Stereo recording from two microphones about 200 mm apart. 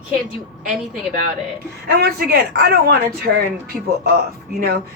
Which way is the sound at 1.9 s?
50° right (ahead or behind).